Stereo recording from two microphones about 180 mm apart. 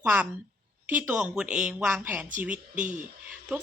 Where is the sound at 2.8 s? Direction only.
45° right (ahead or behind).